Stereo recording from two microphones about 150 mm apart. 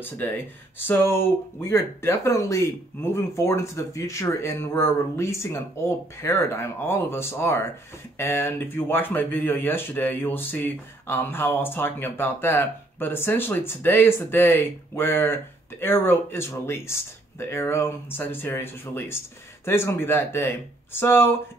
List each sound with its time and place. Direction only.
0.2 s speech: 15° left (ahead or behind)